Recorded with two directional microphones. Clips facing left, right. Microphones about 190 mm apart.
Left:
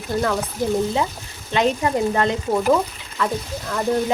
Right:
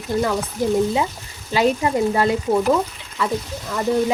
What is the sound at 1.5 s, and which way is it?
Speech, 5° right (ahead or behind).